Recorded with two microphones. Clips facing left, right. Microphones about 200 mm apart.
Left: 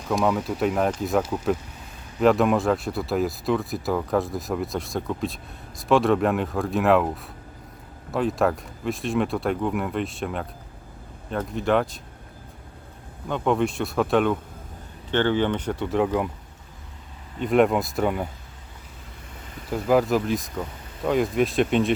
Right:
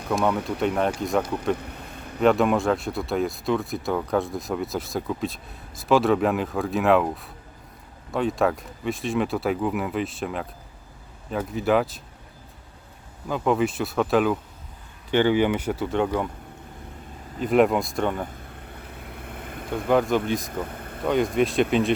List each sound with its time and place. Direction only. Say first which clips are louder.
0.1 s speech: left 1 dB; centre (ahead or behind)
8.1 s speech: even; centre (ahead or behind)
13.2 s speech: even; centre (ahead or behind)
17.4 s speech: even; centre (ahead or behind)
19.0 s vehicle: right 7 dB; 60° right (ahead or behind)
19.7 s speech: left 1 dB; 5° left (ahead or behind)
20.5 s a sound: right 2 dB; 55° right (ahead or behind)
21.0 s speech: even; centre (ahead or behind)